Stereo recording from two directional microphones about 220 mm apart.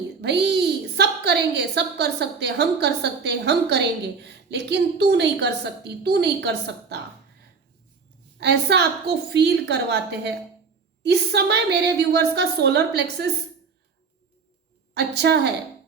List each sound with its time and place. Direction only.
0.2 s a woman's voice: 50° right (ahead or behind)
8.4 s a woman's voice: 50° right (ahead or behind)
14.9 s a woman's voice: 50° right (ahead or behind)